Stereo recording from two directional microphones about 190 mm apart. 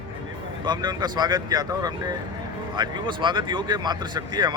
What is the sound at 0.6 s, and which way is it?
Speech, 20° right (ahead or behind).